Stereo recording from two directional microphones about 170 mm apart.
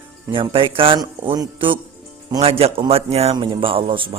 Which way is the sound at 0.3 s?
30° right (ahead or behind).